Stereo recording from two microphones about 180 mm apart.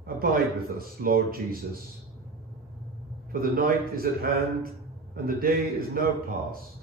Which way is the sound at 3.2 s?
55° right (ahead or behind).